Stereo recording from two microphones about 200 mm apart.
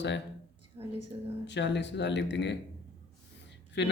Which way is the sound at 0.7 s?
20° right (ahead or behind).